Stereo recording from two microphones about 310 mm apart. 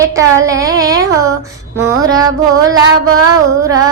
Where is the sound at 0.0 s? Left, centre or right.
Centre.